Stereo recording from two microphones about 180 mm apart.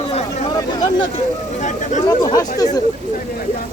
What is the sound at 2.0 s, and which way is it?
Speech, 20° left (ahead or behind).